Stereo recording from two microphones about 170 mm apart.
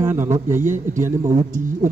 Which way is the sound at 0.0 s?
15° right (ahead or behind).